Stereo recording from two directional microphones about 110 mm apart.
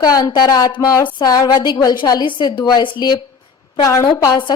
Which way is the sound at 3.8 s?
30° left (ahead or behind).